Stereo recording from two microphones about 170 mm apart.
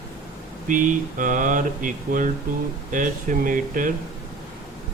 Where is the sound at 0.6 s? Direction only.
50° right (ahead or behind).